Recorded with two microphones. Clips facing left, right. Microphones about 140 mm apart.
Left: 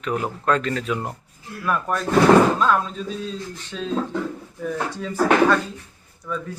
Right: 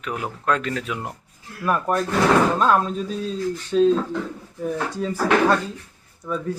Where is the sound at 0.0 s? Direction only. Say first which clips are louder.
Left 3 dB; 5° right (ahead or behind).